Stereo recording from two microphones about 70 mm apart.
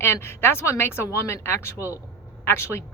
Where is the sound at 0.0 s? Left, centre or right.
Left.